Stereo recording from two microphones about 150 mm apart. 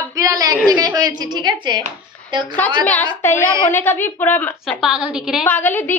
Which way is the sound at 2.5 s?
10° left (ahead or behind).